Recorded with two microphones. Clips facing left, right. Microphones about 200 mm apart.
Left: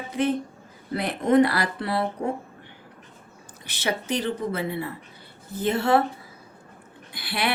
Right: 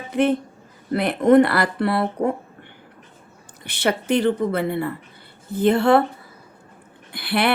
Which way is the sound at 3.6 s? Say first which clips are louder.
Right 6 dB; 60° right (ahead or behind).